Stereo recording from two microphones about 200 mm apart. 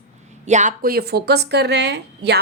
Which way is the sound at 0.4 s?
35° right (ahead or behind).